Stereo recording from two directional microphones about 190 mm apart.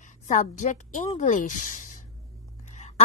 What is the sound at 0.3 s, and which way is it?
A woman's voice, 40° left (ahead or behind).